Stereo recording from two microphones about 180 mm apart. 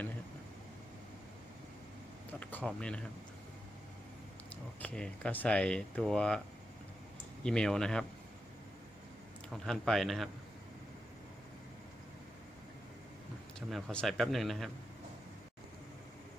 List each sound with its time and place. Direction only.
2.4 s speech: 10° left (ahead or behind)
4.8 s speech: 5° left (ahead or behind)
7.4 s speech: 5° left (ahead or behind)
9.5 s speech: centre (ahead or behind)
13.6 s speech: centre (ahead or behind)